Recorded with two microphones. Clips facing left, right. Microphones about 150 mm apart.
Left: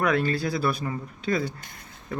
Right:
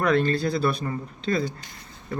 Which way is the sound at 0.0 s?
10° left (ahead or behind).